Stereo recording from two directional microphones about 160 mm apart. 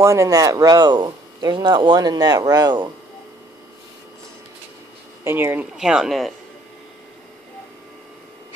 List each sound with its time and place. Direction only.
0.0 s speech: 20° right (ahead or behind)
5.2 s speech: 15° right (ahead or behind)